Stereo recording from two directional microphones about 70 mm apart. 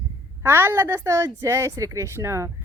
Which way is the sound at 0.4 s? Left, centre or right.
Right.